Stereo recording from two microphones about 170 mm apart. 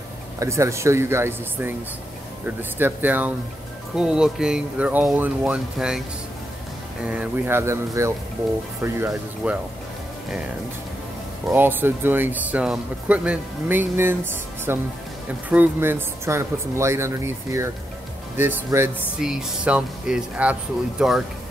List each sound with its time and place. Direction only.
0.4 s speech: 15° right (ahead or behind)
7.1 s speech: 10° right (ahead or behind)
11.4 s speech: 10° right (ahead or behind)